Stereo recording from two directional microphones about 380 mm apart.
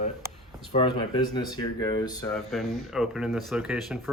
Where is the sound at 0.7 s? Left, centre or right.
Centre.